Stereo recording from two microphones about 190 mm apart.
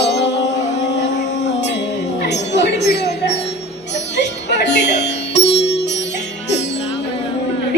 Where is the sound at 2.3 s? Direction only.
65° left (ahead or behind).